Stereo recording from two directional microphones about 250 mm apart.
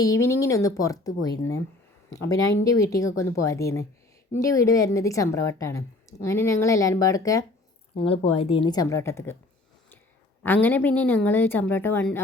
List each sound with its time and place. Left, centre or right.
0.0 s a woman's voice: centre
2.1 s a woman's voice: centre
10.4 s a woman's voice: centre